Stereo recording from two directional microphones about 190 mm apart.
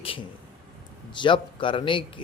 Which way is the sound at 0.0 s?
30° left (ahead or behind).